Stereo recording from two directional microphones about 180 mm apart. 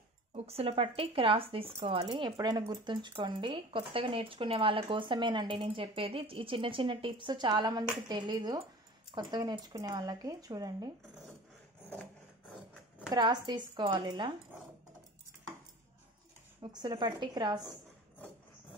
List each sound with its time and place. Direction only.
0.3 s speech: 35° right (ahead or behind)
13.1 s speech: 25° right (ahead or behind)
16.7 s speech: 25° right (ahead or behind)